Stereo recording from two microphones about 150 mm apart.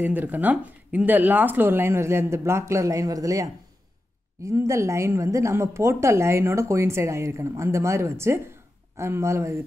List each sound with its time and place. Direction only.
0.0 s a woman's voice: 10° right (ahead or behind)